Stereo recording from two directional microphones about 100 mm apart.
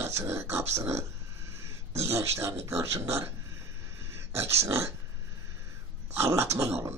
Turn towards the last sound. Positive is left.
turn(degrees=-25)  # may be behind; listen again after turning